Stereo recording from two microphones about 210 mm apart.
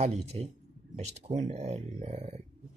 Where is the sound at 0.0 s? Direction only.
30° right (ahead or behind).